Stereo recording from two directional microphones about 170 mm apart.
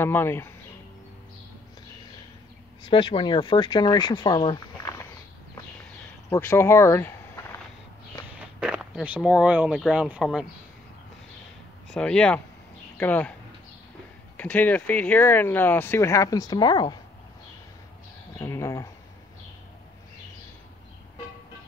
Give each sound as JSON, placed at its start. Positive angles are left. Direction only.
{"t": 0.0, "sound": "speech", "side_deg": 15}
{"t": 2.9, "sound": "speech", "side_deg": 30}
{"t": 6.3, "sound": "speech", "side_deg": 15}
{"t": 8.4, "sound": "speech", "side_deg": -5}
{"t": 11.9, "sound": "speech", "side_deg": 5}
{"t": 14.3, "sound": "speech", "side_deg": 10}
{"t": 18.4, "sound": "a sound", "side_deg": 20}